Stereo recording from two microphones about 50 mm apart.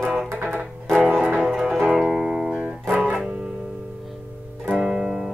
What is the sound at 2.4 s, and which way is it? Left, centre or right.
Music, right.